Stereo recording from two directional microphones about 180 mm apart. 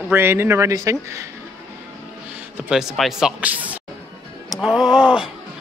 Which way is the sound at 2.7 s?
Centre (ahead or behind).